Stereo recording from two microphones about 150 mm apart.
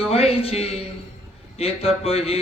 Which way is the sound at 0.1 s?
40° left (ahead or behind).